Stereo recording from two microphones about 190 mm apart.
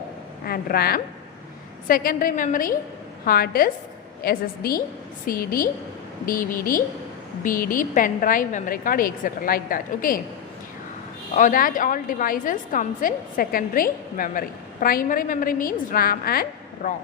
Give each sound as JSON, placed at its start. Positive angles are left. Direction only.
{"t": 0.4, "sound": "a woman's voice", "side_deg": 50}
{"t": 11.3, "sound": "a woman's voice", "side_deg": 45}